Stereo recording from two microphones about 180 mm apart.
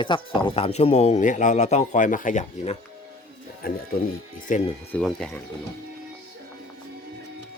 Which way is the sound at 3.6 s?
55° left (ahead or behind).